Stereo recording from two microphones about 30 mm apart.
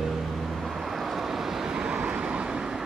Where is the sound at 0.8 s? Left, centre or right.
Centre.